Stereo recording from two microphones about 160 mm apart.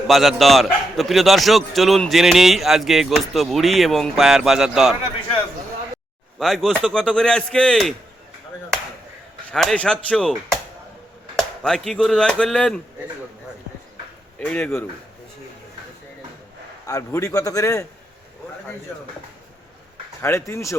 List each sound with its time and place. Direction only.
0.1 s a man's voice: centre (ahead or behind)
6.4 s a man's voice: centre (ahead or behind)
9.5 s a man's voice: 5° left (ahead or behind)
14.3 s speech: 10° left (ahead or behind)
16.8 s a man's voice: 20° left (ahead or behind)
20.5 s a man's voice: 20° left (ahead or behind)